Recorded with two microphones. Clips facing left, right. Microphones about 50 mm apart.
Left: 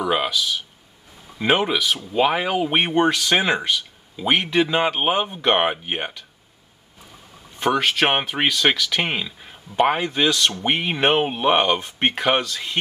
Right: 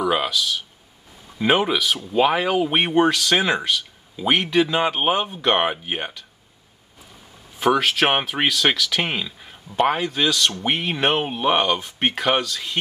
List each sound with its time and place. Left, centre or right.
0.0 s a sound: centre
1.4 s speech: centre
3.1 s speech: centre
7.5 s speech: centre
12.4 s speech: centre